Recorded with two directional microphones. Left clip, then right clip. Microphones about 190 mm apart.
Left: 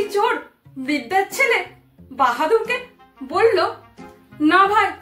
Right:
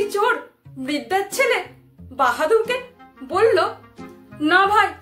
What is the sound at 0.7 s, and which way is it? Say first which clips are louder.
A woman's voice: left 2 dB; 15° right (ahead or behind).